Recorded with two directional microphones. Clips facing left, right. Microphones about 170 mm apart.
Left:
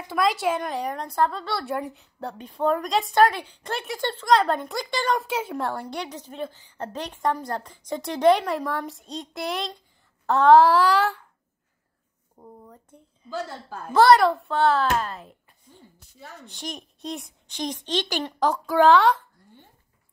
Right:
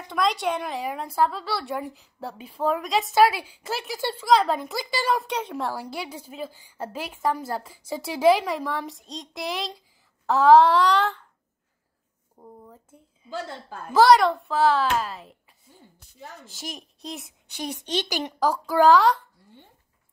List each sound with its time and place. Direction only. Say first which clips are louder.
0.1 s a woman's voice: left 1 dB; 5° left (ahead or behind)
12.4 s a woman's voice: even; 5° right (ahead or behind)
18.4 s a woman's voice: even; 5° right (ahead or behind)